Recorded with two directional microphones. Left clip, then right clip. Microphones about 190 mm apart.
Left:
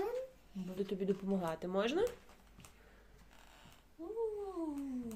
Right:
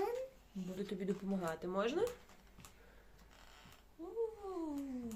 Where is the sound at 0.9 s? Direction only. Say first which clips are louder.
Left 5 dB; 15° left (ahead or behind); by 2.1 s 35° left (ahead or behind).